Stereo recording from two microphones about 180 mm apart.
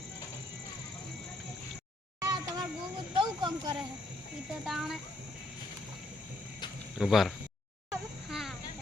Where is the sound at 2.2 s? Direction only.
20° right (ahead or behind).